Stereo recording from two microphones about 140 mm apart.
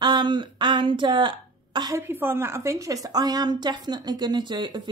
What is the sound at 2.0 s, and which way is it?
A woman's voice, 15° right (ahead or behind).